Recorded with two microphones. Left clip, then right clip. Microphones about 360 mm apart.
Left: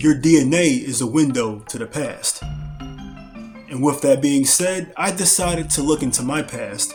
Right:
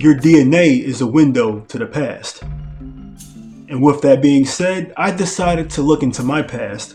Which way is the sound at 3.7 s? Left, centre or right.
Left.